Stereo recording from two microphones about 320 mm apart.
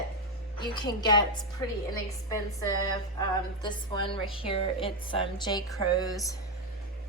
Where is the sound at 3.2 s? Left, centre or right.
Centre.